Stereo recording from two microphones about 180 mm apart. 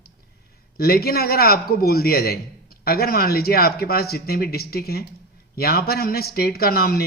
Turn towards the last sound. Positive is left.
turn(degrees=55)  # may be behind; listen again after turning